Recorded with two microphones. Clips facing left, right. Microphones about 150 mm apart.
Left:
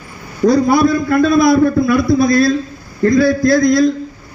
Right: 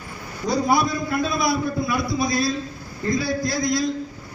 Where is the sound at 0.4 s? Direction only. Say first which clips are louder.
Left 10 dB; 75° left (ahead or behind).